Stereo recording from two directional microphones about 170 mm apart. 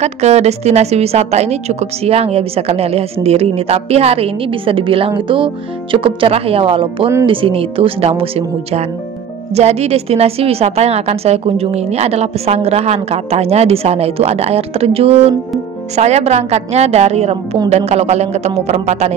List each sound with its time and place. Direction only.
0.0 s a woman's voice: 40° right (ahead or behind)